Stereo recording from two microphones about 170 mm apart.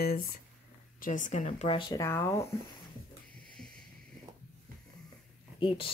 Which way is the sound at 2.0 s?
15° left (ahead or behind).